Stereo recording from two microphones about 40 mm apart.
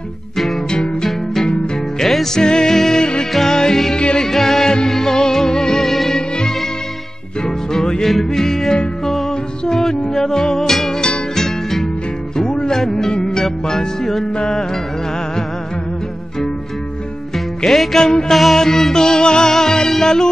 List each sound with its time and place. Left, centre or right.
0.7 s music: centre
4.3 s music: centre
7.4 s music: centre
11.0 s music: centre
17.6 s music: centre